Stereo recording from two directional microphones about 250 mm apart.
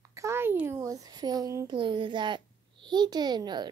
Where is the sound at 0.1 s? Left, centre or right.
Centre.